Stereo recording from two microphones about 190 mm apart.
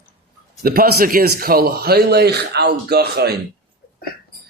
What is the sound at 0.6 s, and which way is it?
Speech, 50° right (ahead or behind).